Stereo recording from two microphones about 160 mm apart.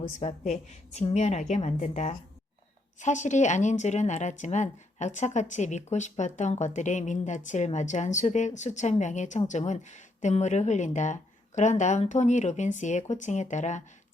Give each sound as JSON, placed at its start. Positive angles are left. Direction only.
{"t": 0.2, "sound": "speech", "side_deg": 45}